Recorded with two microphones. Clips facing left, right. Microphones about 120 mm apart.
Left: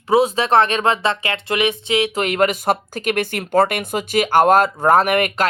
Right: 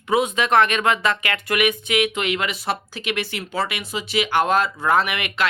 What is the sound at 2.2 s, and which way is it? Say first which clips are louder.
Speech: left 7 dB; 45° left (ahead or behind).